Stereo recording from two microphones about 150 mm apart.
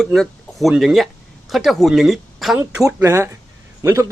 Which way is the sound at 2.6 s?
20° right (ahead or behind).